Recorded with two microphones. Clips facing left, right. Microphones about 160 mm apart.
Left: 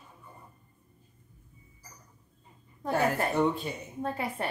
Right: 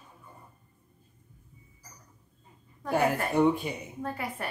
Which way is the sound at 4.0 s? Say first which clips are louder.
Left 4 dB; 25° left (ahead or behind).